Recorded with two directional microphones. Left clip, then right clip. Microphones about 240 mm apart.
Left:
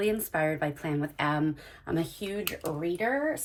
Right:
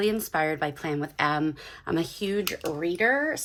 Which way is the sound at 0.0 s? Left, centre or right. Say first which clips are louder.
Right 2 dB; centre.